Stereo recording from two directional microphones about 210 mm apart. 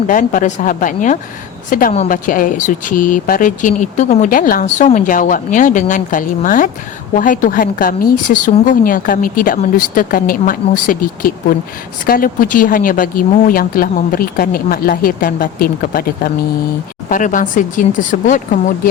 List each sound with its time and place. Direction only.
0.1 s speech: 40° left (ahead or behind)